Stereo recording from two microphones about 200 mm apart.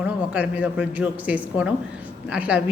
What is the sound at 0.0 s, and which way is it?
A man's voice, 5° right (ahead or behind).